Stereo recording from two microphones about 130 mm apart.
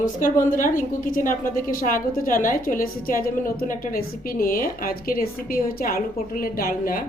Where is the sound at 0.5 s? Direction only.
90° left.